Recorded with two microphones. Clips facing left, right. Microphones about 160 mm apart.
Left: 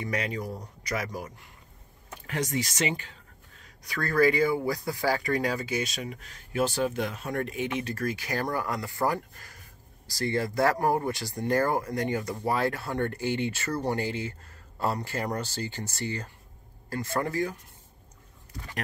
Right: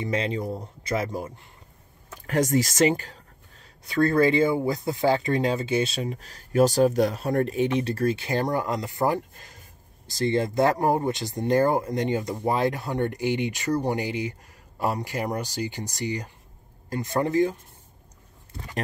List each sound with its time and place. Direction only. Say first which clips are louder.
0.0 s speech: right 4 dB; 25° right (ahead or behind)
2.2 s speech: right 8 dB; 45° right (ahead or behind)
3.6 s speech: right 11 dB; 25° right (ahead or behind)